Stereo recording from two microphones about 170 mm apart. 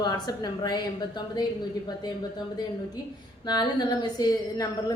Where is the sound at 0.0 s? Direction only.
25° left (ahead or behind).